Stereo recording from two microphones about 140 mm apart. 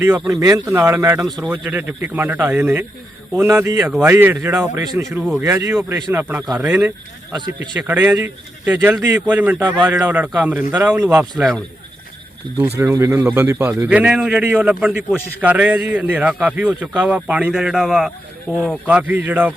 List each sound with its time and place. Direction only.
0.0 s speech: 20° right (ahead or behind)
12.7 s speech: 20° right (ahead or behind)